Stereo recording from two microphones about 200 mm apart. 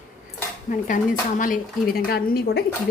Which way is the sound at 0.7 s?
40° left (ahead or behind).